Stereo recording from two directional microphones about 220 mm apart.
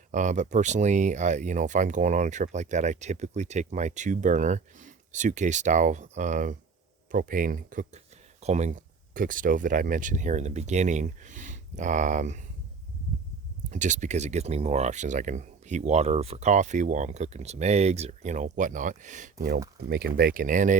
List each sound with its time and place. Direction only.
0.1 s speech: 35° right (ahead or behind)
13.7 s speech: 35° right (ahead or behind)